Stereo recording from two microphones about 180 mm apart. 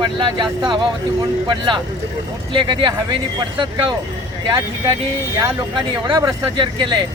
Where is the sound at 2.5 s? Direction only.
25° right (ahead or behind).